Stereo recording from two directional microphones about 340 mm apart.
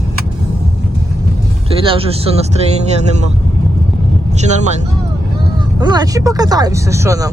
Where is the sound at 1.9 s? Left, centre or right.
Centre.